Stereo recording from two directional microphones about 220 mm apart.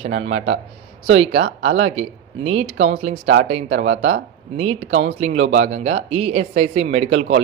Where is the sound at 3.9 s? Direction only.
60° right (ahead or behind).